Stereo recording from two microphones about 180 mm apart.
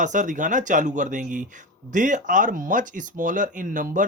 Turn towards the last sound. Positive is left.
turn(degrees=-50)  # may be behind; listen again after turning